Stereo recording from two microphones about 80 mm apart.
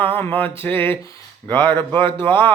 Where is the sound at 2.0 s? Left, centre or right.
Right.